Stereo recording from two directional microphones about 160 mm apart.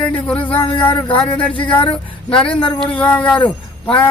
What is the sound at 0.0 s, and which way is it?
Speech, 10° left (ahead or behind).